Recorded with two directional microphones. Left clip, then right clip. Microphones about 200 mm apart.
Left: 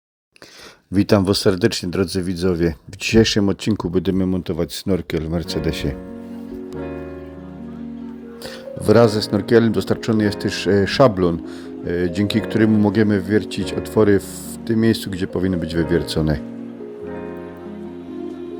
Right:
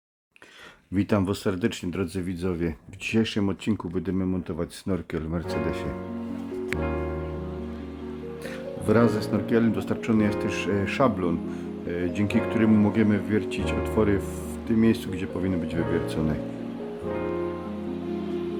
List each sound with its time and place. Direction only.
0.9 s speech: 35° left (ahead or behind)
8.9 s speech: 30° left (ahead or behind)